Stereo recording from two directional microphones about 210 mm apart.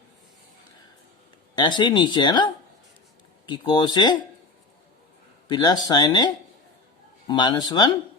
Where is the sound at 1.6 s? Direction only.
20° left (ahead or behind).